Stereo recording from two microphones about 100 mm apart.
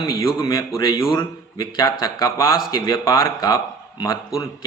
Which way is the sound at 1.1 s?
45° left (ahead or behind).